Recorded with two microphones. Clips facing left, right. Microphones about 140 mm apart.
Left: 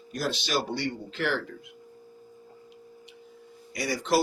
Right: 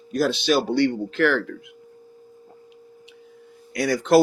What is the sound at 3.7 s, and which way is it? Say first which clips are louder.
Speech: right 8 dB; 65° right (ahead or behind).